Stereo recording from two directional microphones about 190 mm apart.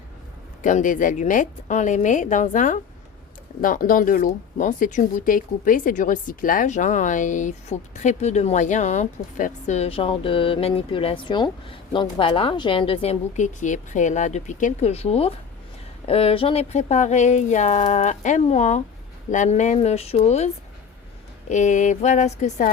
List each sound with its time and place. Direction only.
0.6 s speech: 40° left (ahead or behind)
21.5 s speech: 40° left (ahead or behind)